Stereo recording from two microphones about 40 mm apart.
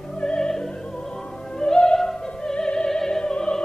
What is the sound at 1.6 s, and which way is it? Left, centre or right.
Opera, left.